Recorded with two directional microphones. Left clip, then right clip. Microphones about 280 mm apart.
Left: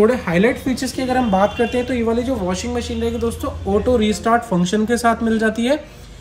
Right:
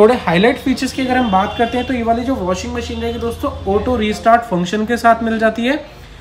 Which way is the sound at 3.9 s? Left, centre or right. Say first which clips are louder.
Right 4 dB; centre.